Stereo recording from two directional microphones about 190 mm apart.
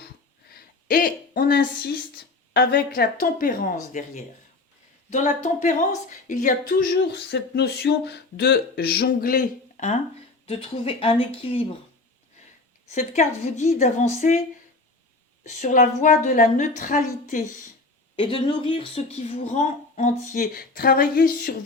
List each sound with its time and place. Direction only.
0.5 s a woman's voice: 50° left (ahead or behind)
5.1 s speech: 40° left (ahead or behind)
10.4 s speech: 30° left (ahead or behind)
12.9 s speech: 40° left (ahead or behind)
15.4 s speech: 40° left (ahead or behind)
18.2 s speech: 30° left (ahead or behind); by 21.5 s 50° left (ahead or behind)